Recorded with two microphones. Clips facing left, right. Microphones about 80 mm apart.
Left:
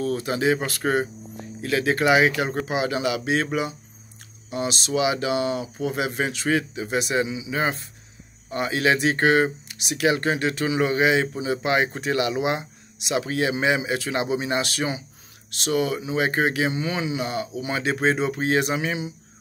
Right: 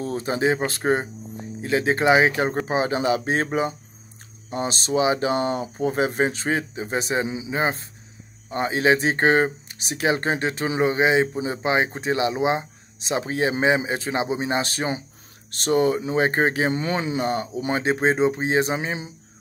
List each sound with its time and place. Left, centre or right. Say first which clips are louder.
0.0 s speech: even; right